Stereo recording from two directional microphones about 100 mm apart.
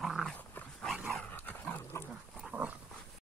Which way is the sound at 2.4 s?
15° right (ahead or behind).